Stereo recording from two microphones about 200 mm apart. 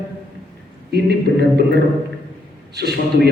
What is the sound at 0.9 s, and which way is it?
Speech, 55° right (ahead or behind).